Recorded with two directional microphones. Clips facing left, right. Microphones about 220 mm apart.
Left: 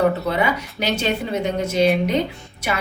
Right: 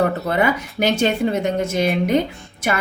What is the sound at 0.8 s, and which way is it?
Speech, 50° right (ahead or behind).